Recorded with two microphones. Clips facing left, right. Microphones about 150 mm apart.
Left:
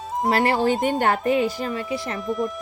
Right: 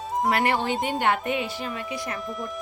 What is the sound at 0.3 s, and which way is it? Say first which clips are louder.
Speech: left 5 dB; 35° left (ahead or behind).